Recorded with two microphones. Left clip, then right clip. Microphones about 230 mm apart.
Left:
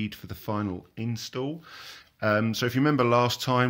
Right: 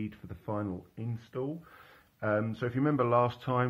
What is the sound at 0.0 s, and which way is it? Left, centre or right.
Speech, left.